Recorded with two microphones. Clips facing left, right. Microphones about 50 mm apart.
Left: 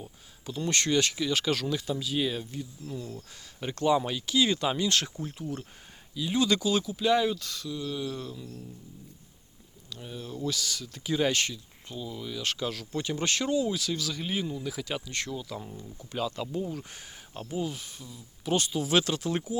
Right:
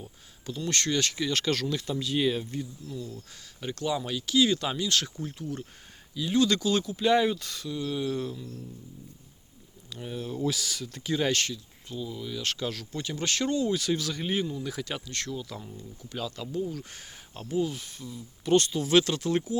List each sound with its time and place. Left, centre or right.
0.0 s a sound: centre
0.6 s speech: centre
1.1 s speech: centre
2.8 s speech: left
4.9 s speech: left
5.2 s speech: centre
9.9 s speech: centre
12.9 s speech: centre
13.4 s speech: centre
13.7 s speech: centre
15.1 s speech: centre
15.4 s speech: centre
15.7 s speech: left
16.6 s speech: centre